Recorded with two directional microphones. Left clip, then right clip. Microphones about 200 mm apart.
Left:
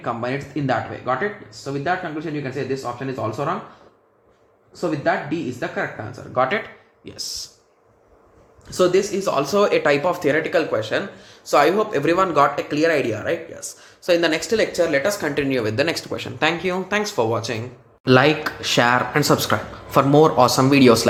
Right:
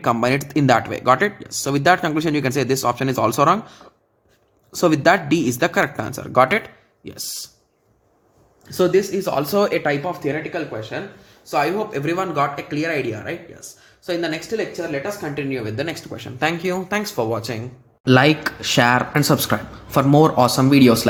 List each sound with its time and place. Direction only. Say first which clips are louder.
0.0 s speech: right 6 dB; 45° right (ahead or behind)
4.7 s speech: right 6 dB; 50° right (ahead or behind); by 7.3 s 35° right (ahead or behind)
9.1 s speech: even; 30° right (ahead or behind)
9.8 s speech: left 3 dB; centre (ahead or behind)
10.2 s speech: left 5 dB; 15° left (ahead or behind)
11.6 s speech: left 2 dB; centre (ahead or behind)
16.4 s speech: even; 25° right (ahead or behind)